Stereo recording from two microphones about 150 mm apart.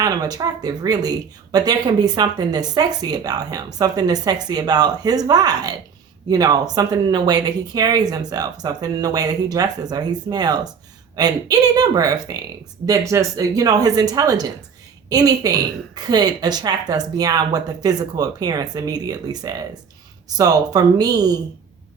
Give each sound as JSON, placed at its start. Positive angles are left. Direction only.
{"t": 0.0, "sound": "speech", "side_deg": -25}